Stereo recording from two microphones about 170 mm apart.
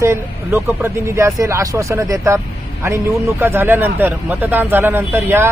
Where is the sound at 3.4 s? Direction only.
15° right (ahead or behind).